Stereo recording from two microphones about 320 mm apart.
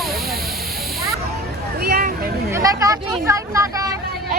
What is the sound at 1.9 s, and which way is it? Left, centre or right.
Speech, right.